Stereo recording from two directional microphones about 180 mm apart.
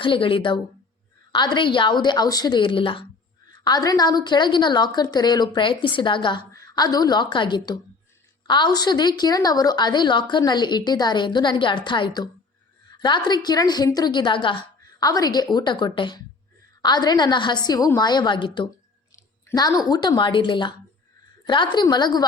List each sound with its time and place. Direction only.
0.0 s a woman's voice: 30° left (ahead or behind)